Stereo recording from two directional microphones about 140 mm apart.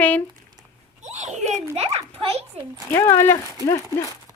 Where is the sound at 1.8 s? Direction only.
45° right (ahead or behind).